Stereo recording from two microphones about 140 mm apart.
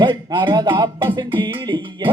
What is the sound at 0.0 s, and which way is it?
Speech, 35° right (ahead or behind).